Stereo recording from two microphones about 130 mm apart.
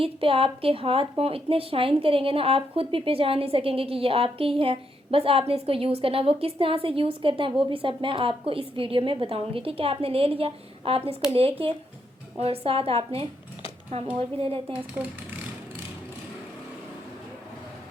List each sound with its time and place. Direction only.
0.0 s a woman's voice: 45° right (ahead or behind)
12.4 s a woman's voice: 45° right (ahead or behind)
14.7 s speech: 10° right (ahead or behind)